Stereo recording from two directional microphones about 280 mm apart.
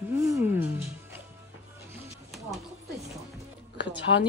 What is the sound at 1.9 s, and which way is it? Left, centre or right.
Music, centre.